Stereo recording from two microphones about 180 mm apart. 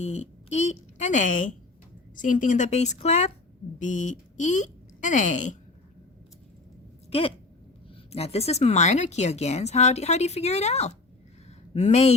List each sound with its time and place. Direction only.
0.0 s speech: 40° left (ahead or behind)
7.1 s speech: 30° left (ahead or behind)